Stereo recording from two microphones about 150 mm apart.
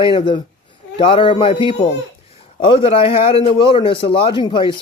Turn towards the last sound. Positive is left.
turn(degrees=35)  # may be behind; listen again after turning